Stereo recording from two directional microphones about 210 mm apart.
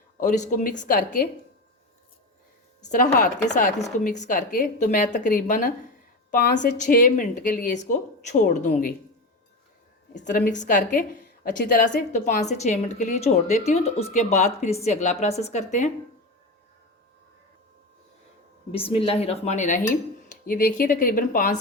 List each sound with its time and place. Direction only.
0.2 s a woman's voice: 35° left (ahead or behind)
2.8 s a woman's voice: 35° left (ahead or behind)
10.2 s a woman's voice: 40° left (ahead or behind)
18.7 s a woman's voice: 25° left (ahead or behind)